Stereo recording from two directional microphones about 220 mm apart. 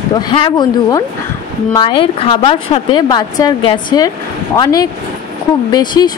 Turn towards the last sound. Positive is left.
turn(degrees=20)  # may be behind; listen again after turning